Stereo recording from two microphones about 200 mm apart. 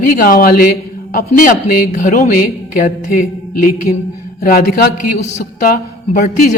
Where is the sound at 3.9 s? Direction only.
15° left (ahead or behind).